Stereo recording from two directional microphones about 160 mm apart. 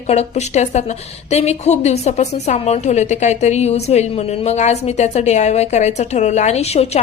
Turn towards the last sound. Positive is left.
turn(degrees=40)  # may be behind; listen again after turning